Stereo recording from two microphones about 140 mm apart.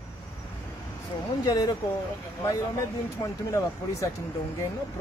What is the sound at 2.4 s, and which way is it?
Speech, 20° left (ahead or behind).